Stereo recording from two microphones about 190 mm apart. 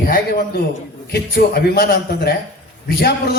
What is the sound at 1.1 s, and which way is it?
A man's voice, 55° left (ahead or behind).